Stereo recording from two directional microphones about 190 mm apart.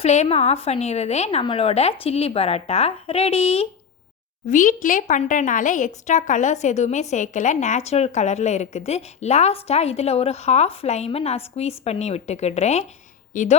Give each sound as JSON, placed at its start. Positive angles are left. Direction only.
{"t": 0.0, "sound": "a woman's voice", "side_deg": 35}
{"t": 4.4, "sound": "a woman's voice", "side_deg": 45}